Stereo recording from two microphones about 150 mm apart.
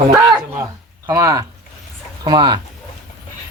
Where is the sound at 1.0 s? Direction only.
20° right (ahead or behind).